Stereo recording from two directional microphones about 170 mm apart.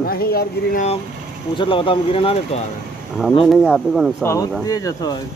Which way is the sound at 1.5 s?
30° left (ahead or behind).